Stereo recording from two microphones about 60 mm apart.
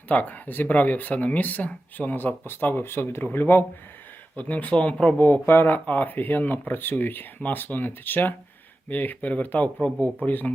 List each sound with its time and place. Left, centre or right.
0.1 s speech: left
4.4 s speech: left